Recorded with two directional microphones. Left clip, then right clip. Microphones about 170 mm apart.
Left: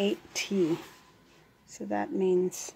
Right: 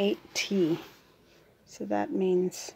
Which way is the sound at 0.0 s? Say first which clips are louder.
Right 2 dB; 10° right (ahead or behind).